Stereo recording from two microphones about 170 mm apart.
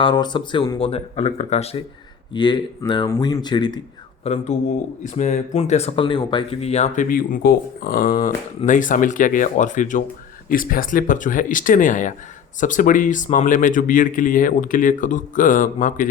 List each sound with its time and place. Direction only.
0.0 s speech: 30° left (ahead or behind)
2.3 s speech: 25° left (ahead or behind)
4.2 s speech: 40° left (ahead or behind)